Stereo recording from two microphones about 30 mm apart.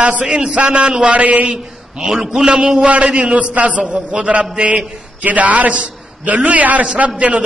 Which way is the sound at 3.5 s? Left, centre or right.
Right.